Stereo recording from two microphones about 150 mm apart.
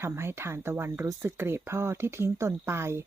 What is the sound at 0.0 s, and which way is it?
Speech, 15° right (ahead or behind).